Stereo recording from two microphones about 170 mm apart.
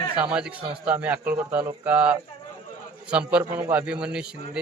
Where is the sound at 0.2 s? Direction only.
5° right (ahead or behind).